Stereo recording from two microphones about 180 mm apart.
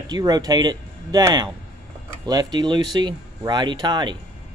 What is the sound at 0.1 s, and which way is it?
Speech, 20° right (ahead or behind).